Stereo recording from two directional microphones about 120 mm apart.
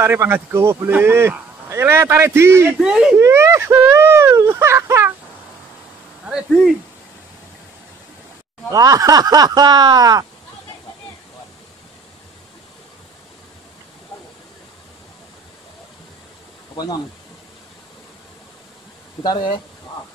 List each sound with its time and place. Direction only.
0.0 s speech: 20° right (ahead or behind)
2.8 s speech: 5° right (ahead or behind)
3.2 s speech: 25° right (ahead or behind)
8.6 s speech: 30° right (ahead or behind)
16.7 s speech: 35° left (ahead or behind)
19.2 s speech: 40° left (ahead or behind)